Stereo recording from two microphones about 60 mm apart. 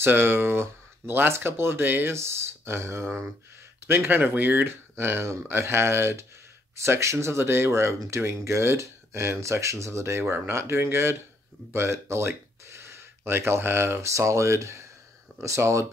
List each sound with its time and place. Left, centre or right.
0.0 s speech: right
2.1 s speech: right